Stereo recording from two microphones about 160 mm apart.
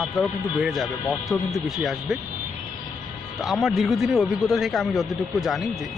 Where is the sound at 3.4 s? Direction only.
Centre (ahead or behind).